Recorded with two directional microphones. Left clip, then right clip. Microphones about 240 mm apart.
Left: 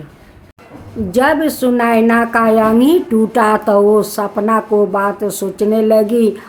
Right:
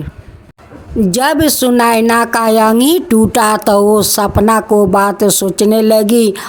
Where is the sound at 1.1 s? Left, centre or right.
Right.